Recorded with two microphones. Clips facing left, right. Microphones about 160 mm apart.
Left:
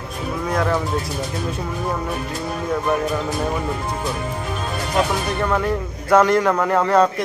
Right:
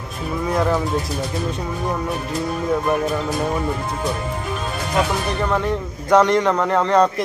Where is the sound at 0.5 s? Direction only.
Centre (ahead or behind).